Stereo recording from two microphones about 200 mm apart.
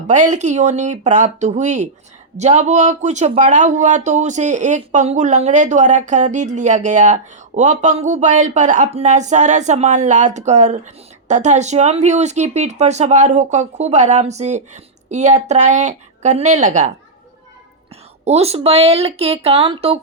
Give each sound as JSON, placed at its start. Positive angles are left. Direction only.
{"t": 0.1, "sound": "speech", "side_deg": -35}
{"t": 18.3, "sound": "speech", "side_deg": -30}